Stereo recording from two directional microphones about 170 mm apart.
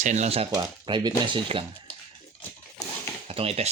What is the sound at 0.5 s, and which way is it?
Speech, 25° right (ahead or behind).